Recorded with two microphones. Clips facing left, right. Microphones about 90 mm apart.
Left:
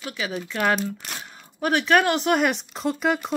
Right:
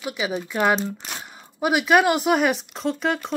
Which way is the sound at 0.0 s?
15° right (ahead or behind).